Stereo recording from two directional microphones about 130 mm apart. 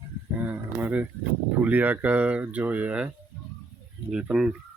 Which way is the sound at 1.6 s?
10° right (ahead or behind).